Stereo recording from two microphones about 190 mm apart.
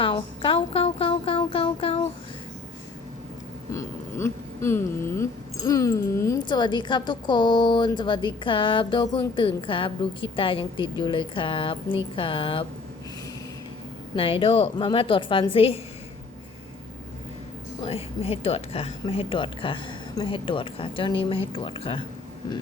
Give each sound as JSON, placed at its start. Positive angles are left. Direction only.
{"t": 0.0, "sound": "music", "side_deg": 25}
{"t": 3.7, "sound": "speech", "side_deg": 15}
{"t": 14.2, "sound": "speech", "side_deg": 30}
{"t": 17.7, "sound": "speech", "side_deg": 30}